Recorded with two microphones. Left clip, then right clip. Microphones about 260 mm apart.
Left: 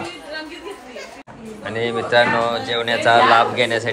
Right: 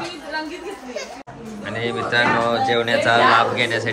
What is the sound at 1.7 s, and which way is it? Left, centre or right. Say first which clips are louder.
A man's voice: left 3 dB; centre.